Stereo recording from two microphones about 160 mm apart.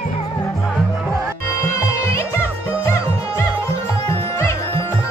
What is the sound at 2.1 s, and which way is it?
Music, 15° left (ahead or behind).